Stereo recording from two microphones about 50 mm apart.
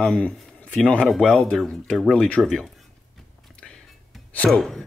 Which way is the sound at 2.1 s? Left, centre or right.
Left.